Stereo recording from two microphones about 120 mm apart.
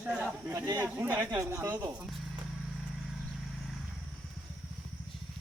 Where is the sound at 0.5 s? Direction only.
30° right (ahead or behind).